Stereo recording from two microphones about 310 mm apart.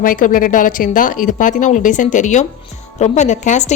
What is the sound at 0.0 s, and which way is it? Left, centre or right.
A woman's voice, left.